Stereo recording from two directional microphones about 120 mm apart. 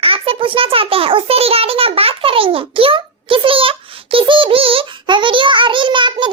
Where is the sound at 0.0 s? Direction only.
50° right (ahead or behind).